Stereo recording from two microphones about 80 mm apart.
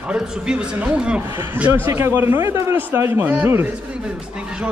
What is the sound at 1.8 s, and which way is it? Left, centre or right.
Speech, right.